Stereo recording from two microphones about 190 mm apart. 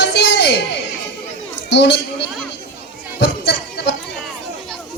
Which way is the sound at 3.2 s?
65° left (ahead or behind).